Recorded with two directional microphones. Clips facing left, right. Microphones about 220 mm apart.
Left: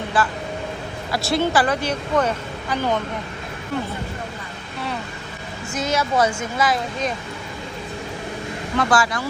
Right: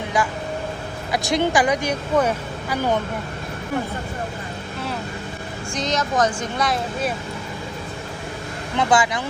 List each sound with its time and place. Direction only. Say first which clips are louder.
0.1 s speech: even; 10° right (ahead or behind)
5.7 s a woman's voice: left 1 dB; 5° left (ahead or behind)
8.7 s speech: right 1 dB; 20° right (ahead or behind)